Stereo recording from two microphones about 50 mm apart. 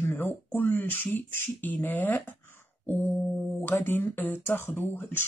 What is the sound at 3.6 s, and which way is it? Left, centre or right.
Speech, left.